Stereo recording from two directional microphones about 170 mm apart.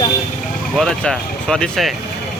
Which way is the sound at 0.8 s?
5° left (ahead or behind).